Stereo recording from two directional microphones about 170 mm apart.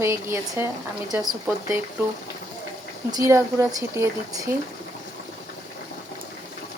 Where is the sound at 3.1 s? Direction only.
20° right (ahead or behind).